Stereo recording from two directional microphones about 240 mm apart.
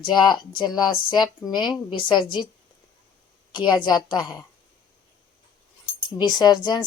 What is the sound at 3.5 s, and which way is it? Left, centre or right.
Speech, centre.